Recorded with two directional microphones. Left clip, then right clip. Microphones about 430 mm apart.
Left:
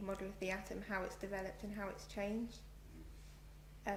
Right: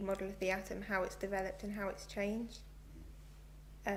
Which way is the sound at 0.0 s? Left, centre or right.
Right.